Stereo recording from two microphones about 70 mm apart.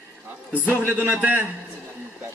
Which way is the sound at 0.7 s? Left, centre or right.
Right.